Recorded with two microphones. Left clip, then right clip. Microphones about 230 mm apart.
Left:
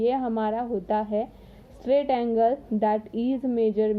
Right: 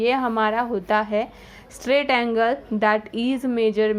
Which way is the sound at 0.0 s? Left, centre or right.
Centre.